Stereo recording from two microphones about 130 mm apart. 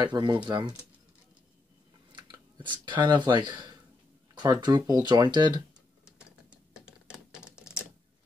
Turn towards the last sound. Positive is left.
turn(degrees=-5)  # may be behind; listen again after turning